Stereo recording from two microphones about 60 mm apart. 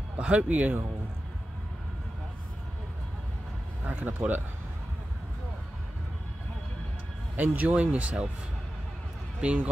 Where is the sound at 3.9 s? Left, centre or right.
Right.